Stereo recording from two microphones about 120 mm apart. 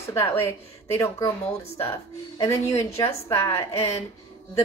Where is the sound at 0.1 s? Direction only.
20° left (ahead or behind).